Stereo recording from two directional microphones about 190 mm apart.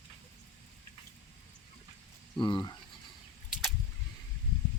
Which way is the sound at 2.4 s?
25° left (ahead or behind).